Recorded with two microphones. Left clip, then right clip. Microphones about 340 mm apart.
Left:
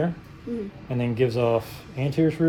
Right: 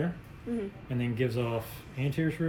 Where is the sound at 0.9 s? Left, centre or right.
Centre.